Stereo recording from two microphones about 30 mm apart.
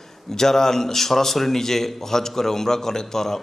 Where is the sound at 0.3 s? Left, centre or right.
Centre.